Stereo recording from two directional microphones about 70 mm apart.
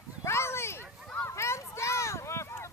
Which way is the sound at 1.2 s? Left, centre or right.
Left.